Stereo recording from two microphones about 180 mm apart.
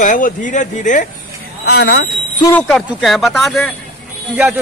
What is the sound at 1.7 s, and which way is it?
Speech, 70° left (ahead or behind).